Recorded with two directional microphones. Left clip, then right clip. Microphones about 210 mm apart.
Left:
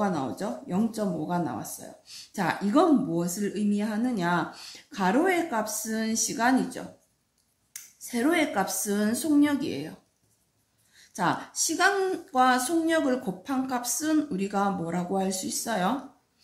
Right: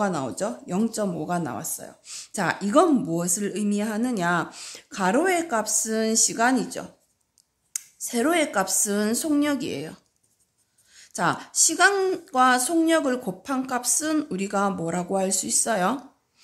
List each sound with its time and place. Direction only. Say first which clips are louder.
0.0 s speech: right 3 dB; 45° right (ahead or behind)
11.0 s speech: right 3 dB; 45° right (ahead or behind)